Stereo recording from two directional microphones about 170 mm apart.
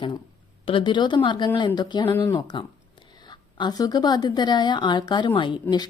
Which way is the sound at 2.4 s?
25° left (ahead or behind).